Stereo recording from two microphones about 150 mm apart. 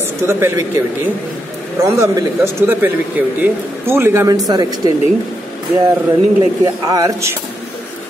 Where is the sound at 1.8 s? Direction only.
20° right (ahead or behind).